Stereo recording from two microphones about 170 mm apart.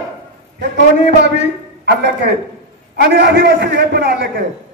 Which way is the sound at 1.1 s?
85° right.